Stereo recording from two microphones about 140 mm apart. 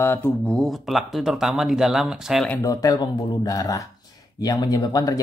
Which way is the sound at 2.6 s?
25° left (ahead or behind).